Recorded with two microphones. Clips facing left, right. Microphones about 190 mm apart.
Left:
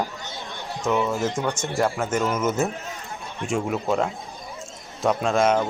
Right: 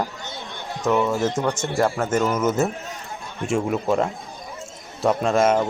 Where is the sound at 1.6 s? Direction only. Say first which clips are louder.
Right 2 dB; 15° right (ahead or behind).